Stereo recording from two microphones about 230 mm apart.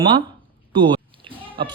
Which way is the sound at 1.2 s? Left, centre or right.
Right.